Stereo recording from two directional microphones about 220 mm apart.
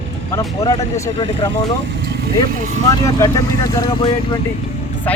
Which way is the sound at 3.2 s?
15° left (ahead or behind).